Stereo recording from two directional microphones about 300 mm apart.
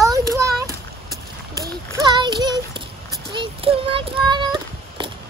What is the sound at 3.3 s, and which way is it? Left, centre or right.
Child singing, centre.